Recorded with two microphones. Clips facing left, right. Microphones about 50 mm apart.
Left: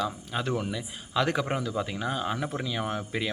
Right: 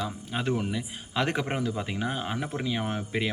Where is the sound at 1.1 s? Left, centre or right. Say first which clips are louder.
Left 1 dB; right.